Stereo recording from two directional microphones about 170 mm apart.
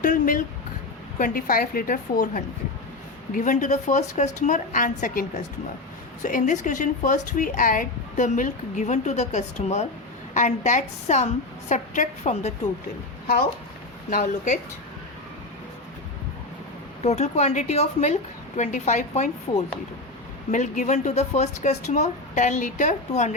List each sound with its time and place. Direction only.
0.0 s a woman's voice: 50° left (ahead or behind)
13.2 s speech: 55° left (ahead or behind)
17.0 s a woman's voice: 40° left (ahead or behind)